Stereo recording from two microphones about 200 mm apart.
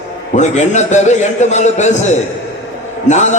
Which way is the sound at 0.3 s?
35° left (ahead or behind).